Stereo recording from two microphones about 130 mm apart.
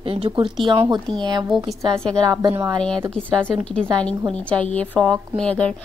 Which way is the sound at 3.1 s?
10° left (ahead or behind).